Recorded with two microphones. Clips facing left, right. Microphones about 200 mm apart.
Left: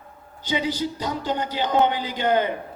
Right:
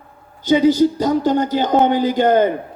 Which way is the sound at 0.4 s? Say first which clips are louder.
Right 12 dB; 45° right (ahead or behind).